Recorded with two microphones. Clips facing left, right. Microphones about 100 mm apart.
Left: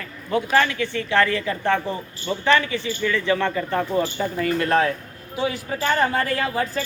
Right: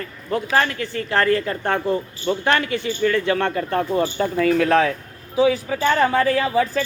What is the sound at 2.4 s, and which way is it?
Speech, 55° right (ahead or behind).